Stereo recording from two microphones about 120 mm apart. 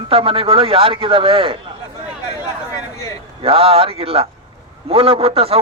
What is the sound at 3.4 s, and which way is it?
A man's voice, 50° right (ahead or behind).